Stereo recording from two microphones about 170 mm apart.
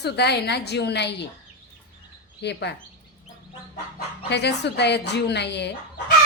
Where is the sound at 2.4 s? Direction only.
85° left.